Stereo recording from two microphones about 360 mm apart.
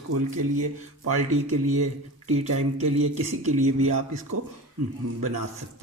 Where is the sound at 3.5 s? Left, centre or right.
Centre.